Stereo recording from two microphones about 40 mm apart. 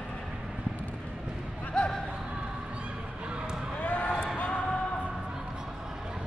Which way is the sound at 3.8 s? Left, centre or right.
Left.